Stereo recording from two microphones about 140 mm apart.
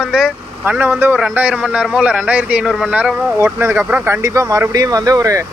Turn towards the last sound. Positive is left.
turn(degrees=-25)  # may be behind; listen again after turning